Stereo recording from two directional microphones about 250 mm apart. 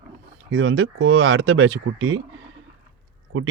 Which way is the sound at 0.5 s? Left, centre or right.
Right.